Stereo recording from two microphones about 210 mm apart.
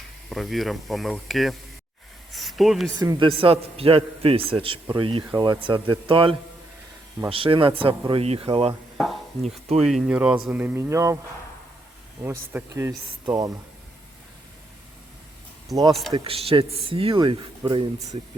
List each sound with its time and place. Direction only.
0.3 s speech: centre (ahead or behind)
2.3 s a sound: centre (ahead or behind)
3.0 s a man's voice: 20° right (ahead or behind)
9.8 s speech: 5° right (ahead or behind)
12.2 s speech: 10° right (ahead or behind)
15.9 s speech: centre (ahead or behind)
16.1 s a man's voice: 25° right (ahead or behind)